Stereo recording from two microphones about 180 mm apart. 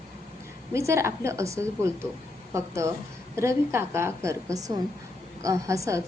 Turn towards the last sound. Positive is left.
turn(degrees=-15)  # may be behind; listen again after turning